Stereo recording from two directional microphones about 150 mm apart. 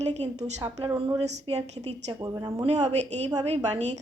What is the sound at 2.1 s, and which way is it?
Speech, 25° right (ahead or behind).